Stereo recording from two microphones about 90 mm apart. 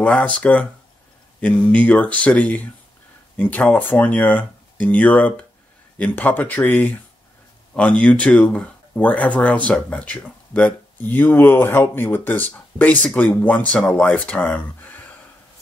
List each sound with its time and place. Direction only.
0.0 s speech: 15° left (ahead or behind)